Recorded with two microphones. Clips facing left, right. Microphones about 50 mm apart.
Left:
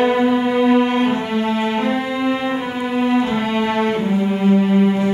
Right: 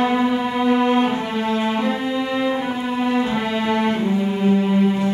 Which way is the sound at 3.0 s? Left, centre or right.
Centre.